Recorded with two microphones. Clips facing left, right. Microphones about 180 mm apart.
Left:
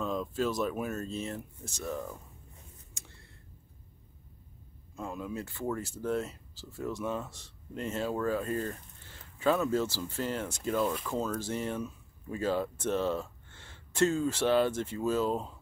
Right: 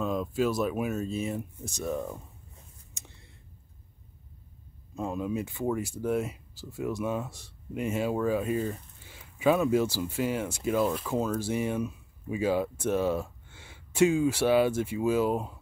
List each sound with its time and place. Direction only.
0.0 s speech: 10° right (ahead or behind); by 2.2 s 25° right (ahead or behind)
2.9 s a sound: 20° right (ahead or behind)
4.9 s speech: 20° right (ahead or behind)